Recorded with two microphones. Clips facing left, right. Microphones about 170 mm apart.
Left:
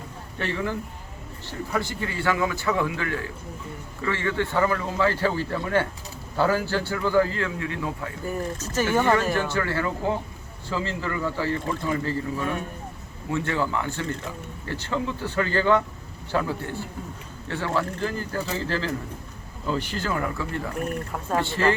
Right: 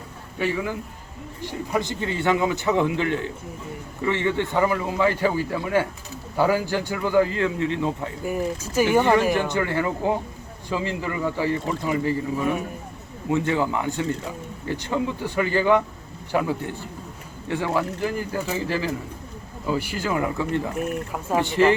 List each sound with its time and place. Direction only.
0.3 s speech: 10° right (ahead or behind)
8.2 s speech: 10° right (ahead or behind)
20.7 s speech: 10° right (ahead or behind)